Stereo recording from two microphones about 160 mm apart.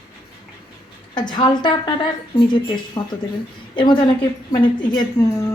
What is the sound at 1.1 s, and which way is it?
Speech, 30° left (ahead or behind).